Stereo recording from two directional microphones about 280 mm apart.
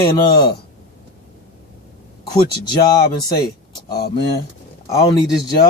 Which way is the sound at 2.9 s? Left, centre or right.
Centre.